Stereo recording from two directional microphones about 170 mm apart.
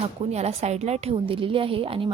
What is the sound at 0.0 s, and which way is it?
A woman's voice, 40° right (ahead or behind).